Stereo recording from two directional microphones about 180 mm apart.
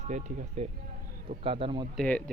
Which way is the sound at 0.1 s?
40° right (ahead or behind).